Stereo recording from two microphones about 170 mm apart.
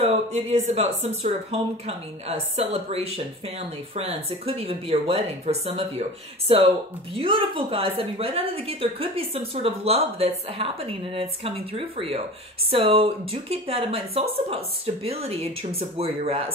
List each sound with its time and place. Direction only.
0.0 s speech: 40° right (ahead or behind)